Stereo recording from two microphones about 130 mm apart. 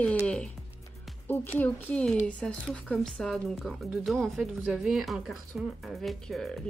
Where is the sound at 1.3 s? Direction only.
15° left (ahead or behind).